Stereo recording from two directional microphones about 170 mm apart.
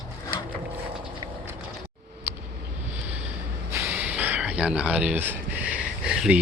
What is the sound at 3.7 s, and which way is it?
Speech, 10° right (ahead or behind).